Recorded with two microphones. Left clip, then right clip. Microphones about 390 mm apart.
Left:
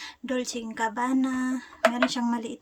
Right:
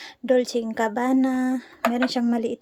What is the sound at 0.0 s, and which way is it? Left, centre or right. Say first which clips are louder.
Speech: right 10 dB; centre.